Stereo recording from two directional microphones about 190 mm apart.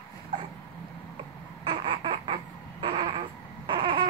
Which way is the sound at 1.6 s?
25° right (ahead or behind).